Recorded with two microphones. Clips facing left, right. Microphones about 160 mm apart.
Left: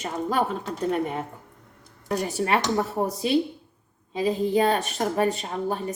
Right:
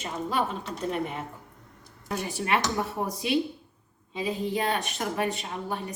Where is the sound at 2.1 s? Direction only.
40° left (ahead or behind).